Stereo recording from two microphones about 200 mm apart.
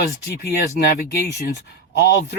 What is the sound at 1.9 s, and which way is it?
Speech, 60° left (ahead or behind).